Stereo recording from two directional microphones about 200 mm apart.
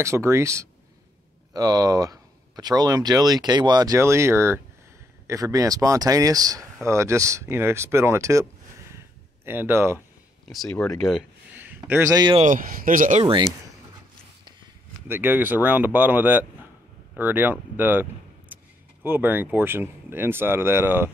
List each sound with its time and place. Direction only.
0.0 s speech: 15° right (ahead or behind)
8.9 s a sound: 10° right (ahead or behind)
10.5 s speech: 5° left (ahead or behind)
11.5 s a sound: 10° right (ahead or behind)
12.4 s speech: 40° right (ahead or behind)
13.2 s speech: 20° right (ahead or behind)
15.0 s speech: 10° right (ahead or behind)
18.5 s a sound: 10° right (ahead or behind)
19.0 s speech: 10° right (ahead or behind)